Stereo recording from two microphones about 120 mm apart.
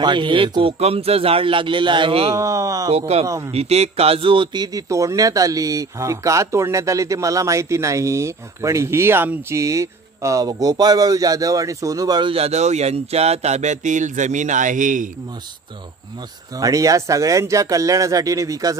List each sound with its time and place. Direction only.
0.0 s speech: 40° right (ahead or behind)
2.3 s a man's voice: 25° right (ahead or behind)
2.9 s speech: 60° right (ahead or behind)
3.3 s a man's voice: 25° right (ahead or behind)
3.5 s a man's voice: 60° right (ahead or behind); by 12.3 s 30° right (ahead or behind)
12.3 s speech: 60° right (ahead or behind); by 15.0 s 90° right
16.5 s a man's voice: 30° right (ahead or behind)